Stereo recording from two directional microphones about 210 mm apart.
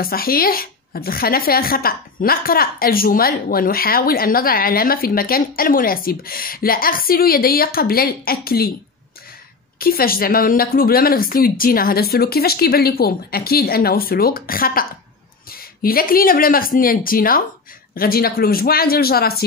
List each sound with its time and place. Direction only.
0.0 s a woman's voice: 45° left (ahead or behind)
9.8 s a woman's voice: 45° left (ahead or behind)